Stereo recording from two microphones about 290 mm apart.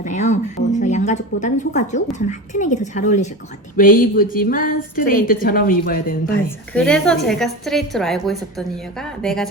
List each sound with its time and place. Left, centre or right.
0.0 s speech: left
6.7 s a woman's voice: centre